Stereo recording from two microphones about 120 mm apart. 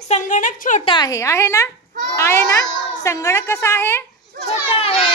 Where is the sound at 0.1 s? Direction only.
90° left.